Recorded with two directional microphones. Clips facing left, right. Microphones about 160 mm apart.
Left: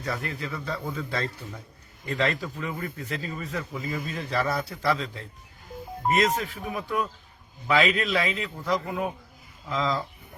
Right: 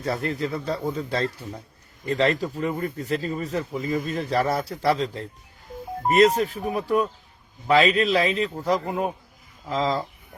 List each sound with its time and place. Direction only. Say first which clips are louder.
0.0 s speech: right 6 dB; 35° right (ahead or behind)